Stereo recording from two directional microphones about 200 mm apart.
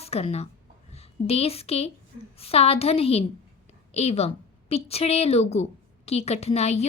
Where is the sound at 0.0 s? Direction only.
30° left (ahead or behind).